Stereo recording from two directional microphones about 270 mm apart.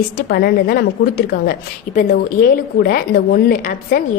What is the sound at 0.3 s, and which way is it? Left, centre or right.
Speech, left.